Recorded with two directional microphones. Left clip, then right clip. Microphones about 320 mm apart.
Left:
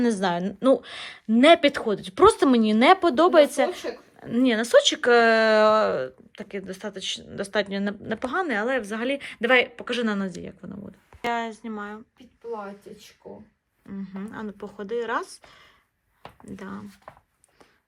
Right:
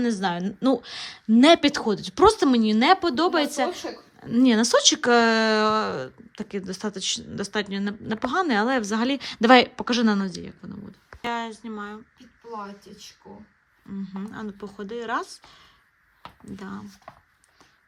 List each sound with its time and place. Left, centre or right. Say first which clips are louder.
0.0 s a woman's voice: left 2 dB; centre
13.9 s a woman's voice: even; centre